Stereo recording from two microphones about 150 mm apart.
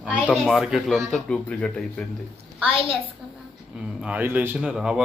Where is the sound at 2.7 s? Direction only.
35° right (ahead or behind).